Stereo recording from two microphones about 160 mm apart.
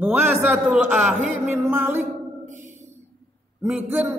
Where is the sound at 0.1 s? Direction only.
10° right (ahead or behind).